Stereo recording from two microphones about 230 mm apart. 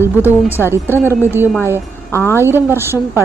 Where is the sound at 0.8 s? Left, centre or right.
Centre.